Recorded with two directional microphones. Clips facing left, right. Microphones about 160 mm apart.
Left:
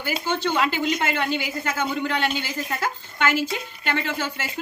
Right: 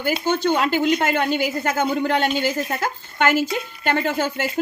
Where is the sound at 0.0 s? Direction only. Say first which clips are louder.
Right 5 dB; 45° right (ahead or behind).